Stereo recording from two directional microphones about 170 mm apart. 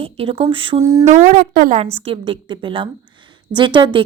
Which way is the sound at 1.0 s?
45° right (ahead or behind).